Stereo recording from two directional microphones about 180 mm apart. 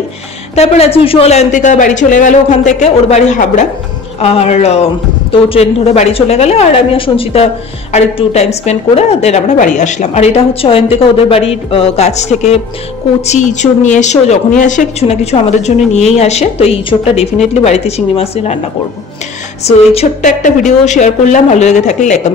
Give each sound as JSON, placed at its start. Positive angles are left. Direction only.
{"t": 0.6, "sound": "a woman's voice", "side_deg": 35}
{"t": 19.6, "sound": "a woman's voice", "side_deg": 35}